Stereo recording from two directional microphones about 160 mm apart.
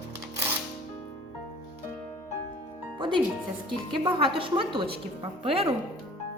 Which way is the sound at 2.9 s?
30° right (ahead or behind).